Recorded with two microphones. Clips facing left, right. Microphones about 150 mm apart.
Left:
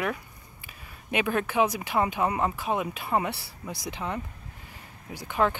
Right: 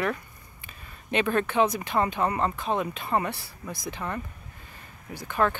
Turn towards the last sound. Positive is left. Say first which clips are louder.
# even
turn(degrees=15)  # may be behind; listen again after turning